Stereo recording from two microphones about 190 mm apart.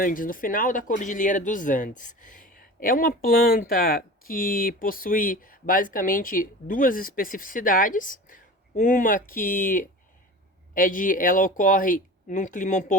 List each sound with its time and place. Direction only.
0.0 s speech: 45° left (ahead or behind)